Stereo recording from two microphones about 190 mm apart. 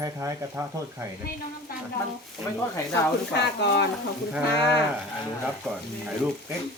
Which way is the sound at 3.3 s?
65° left (ahead or behind).